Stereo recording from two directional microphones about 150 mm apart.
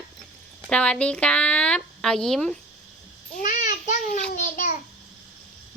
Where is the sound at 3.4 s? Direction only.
60° left (ahead or behind).